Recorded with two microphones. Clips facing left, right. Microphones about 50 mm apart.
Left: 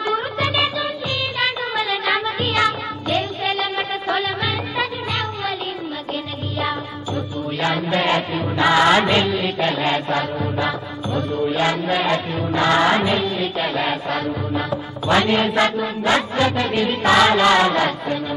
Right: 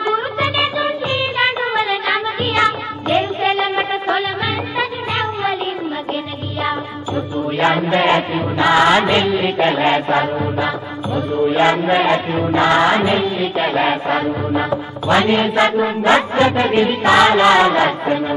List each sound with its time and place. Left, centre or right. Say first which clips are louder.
0.0 s music: right 3 dB; centre
2.0 s music: right 2 dB; centre
7.2 s music: right 6 dB; right
8.5 s mantra: right 2 dB; centre
9.4 s music: right 5 dB; right
12.5 s mantra: right 2 dB; centre
13.7 s music: right 5 dB; right
14.7 s mantra: right 3 dB; centre
15.8 s music: right 5 dB; right
16.7 s mantra: right 2 dB; centre